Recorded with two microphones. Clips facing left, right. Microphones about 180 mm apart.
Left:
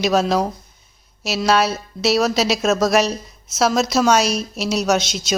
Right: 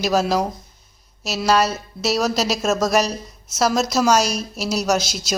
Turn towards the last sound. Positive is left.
turn(degrees=0)  # may be behind; listen again after turning